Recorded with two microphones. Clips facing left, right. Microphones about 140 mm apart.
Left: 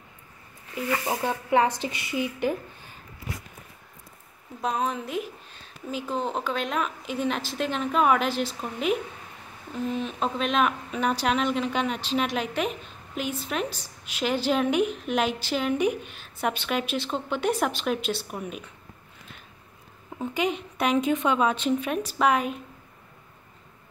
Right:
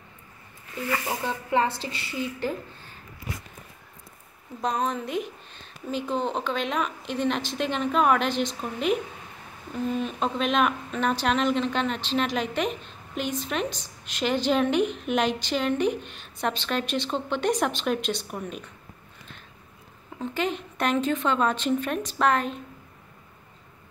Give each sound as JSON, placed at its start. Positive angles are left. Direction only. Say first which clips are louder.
{"t": 0.8, "sound": "a woman's voice", "louder": "left 2 dB", "side_deg": 15}
{"t": 4.6, "sound": "speech", "louder": "right 1 dB", "side_deg": 5}
{"t": 20.2, "sound": "a woman's voice", "louder": "left 1 dB", "side_deg": 10}